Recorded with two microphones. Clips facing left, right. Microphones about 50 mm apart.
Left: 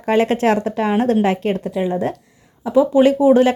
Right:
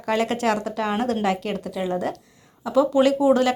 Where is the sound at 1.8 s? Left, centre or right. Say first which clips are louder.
Left 2 dB; left.